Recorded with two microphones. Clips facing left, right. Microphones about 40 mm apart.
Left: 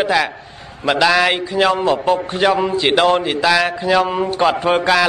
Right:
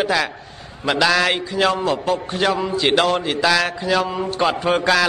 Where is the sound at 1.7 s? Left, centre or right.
Left.